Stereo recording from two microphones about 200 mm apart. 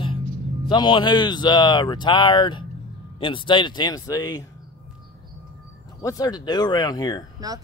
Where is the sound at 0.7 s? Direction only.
25° left (ahead or behind).